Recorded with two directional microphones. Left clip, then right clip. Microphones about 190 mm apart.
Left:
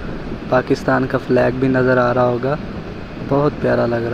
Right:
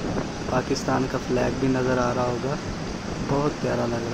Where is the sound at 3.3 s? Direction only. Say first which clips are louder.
Left 9 dB; 20° left (ahead or behind).